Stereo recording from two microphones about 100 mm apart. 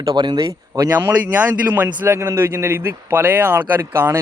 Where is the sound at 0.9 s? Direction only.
20° right (ahead or behind).